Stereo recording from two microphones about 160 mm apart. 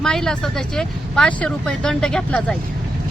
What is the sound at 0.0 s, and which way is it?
Speech, 5° left (ahead or behind).